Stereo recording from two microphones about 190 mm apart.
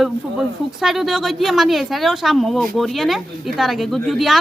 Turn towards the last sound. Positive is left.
turn(degrees=0)  # may be behind; listen again after turning